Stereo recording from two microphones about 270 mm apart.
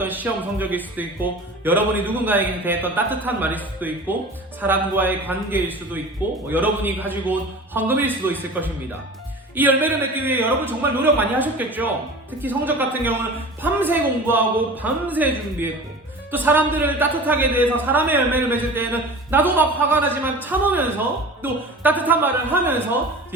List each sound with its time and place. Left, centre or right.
0.0 s speech: centre